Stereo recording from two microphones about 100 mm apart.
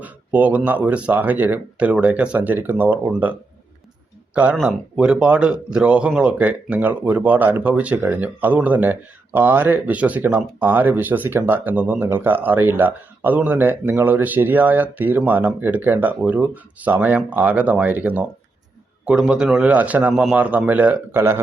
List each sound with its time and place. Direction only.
0.0 s speech: 15° right (ahead or behind)
4.9 s speech: 10° right (ahead or behind); by 21.4 s 25° right (ahead or behind)